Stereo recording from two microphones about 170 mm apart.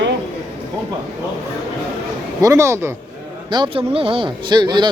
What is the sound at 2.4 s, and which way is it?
Speech, 20° right (ahead or behind).